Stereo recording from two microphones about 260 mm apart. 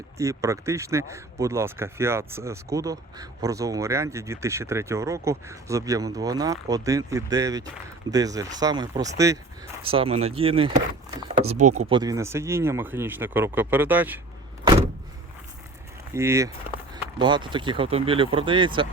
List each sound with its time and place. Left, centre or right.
0.2 s speech: centre
11.6 s speech: right
11.9 s speech: centre
16.1 s speech: centre